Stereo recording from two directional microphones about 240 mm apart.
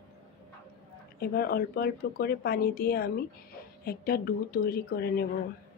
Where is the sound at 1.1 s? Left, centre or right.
Left.